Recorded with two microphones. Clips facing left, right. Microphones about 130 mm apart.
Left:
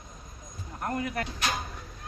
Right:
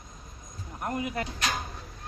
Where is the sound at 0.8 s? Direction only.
15° right (ahead or behind).